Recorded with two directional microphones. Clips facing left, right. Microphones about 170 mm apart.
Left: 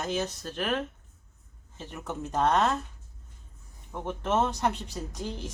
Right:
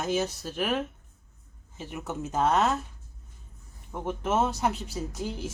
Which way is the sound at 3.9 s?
5° right (ahead or behind).